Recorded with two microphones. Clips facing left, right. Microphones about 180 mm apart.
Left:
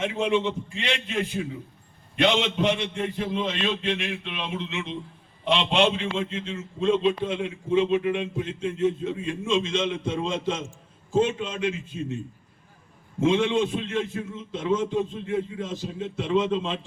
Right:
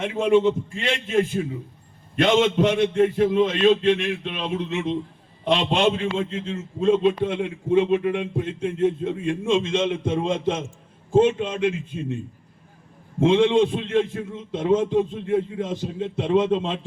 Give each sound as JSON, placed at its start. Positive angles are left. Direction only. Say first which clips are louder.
{"t": 0.0, "sound": "a man's voice", "louder": "right 6 dB", "side_deg": -50}
{"t": 13.1, "sound": "a man's voice", "louder": "right 5 dB", "side_deg": -55}